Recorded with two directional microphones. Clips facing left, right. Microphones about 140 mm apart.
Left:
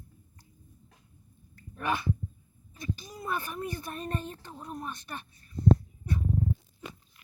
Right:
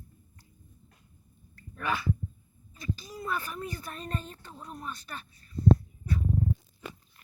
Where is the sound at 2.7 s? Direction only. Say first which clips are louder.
Right 1 dB; 20° left (ahead or behind).